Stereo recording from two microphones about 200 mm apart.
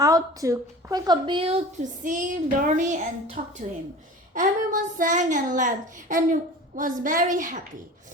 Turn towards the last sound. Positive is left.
turn(degrees=-40)  # may be behind; listen again after turning